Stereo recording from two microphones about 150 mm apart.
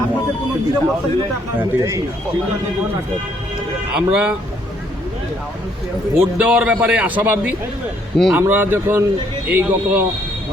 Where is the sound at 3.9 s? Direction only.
5° right (ahead or behind).